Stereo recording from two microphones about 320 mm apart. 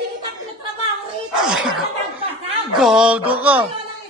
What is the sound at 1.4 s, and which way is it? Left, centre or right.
Speech, centre.